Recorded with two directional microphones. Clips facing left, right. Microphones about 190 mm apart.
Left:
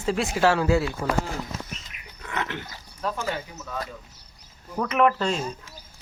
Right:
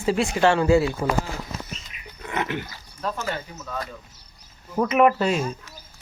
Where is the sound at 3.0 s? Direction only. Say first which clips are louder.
Even; 10° left (ahead or behind).